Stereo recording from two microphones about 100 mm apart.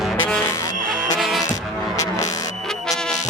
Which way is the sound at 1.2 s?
Centre (ahead or behind).